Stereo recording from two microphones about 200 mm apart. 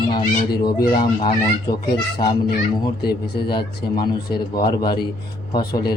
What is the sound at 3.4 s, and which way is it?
A man's voice, 20° left (ahead or behind).